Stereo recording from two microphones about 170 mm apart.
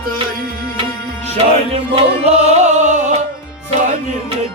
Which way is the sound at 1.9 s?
40° right (ahead or behind).